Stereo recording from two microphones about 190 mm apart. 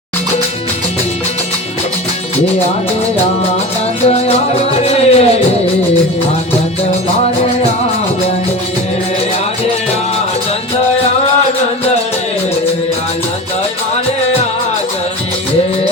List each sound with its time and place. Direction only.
4.0 s music: 30° left (ahead or behind)